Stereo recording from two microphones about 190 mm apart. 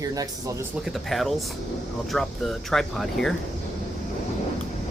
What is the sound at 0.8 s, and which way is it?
Speech, centre (ahead or behind).